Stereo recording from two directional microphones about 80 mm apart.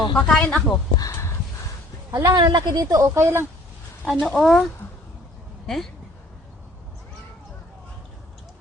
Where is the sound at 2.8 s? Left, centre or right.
Right.